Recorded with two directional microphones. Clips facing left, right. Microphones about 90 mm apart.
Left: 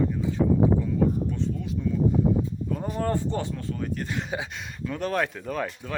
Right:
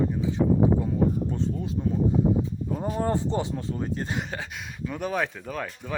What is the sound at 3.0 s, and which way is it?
Speech, 20° right (ahead or behind).